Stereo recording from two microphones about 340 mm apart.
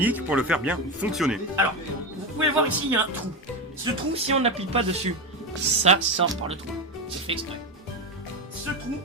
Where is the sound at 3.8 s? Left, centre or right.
Centre.